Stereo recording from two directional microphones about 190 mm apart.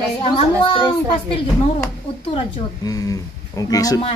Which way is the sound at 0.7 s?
25° left (ahead or behind).